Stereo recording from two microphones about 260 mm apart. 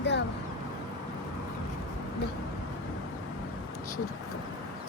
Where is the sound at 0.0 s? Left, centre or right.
Left.